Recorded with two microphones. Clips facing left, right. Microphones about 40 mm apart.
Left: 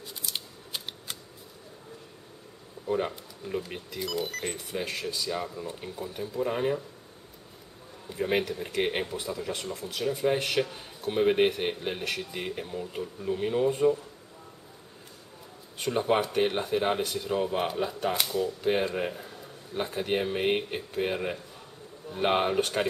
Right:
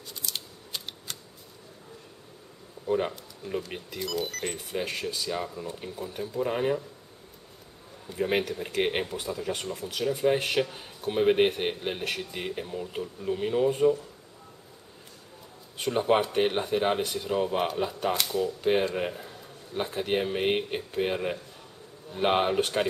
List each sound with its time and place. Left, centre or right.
0.0 s scissors: centre
2.9 s a man's voice: centre
4.6 s a man's voice: centre
8.1 s a man's voice: centre
15.8 s a man's voice: centre